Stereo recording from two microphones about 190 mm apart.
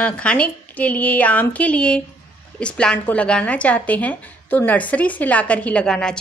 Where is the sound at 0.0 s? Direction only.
5° left (ahead or behind).